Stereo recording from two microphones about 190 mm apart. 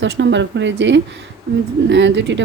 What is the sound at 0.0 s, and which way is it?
Speech, 70° right (ahead or behind).